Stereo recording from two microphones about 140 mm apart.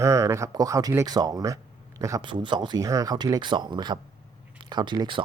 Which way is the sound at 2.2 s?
35° right (ahead or behind).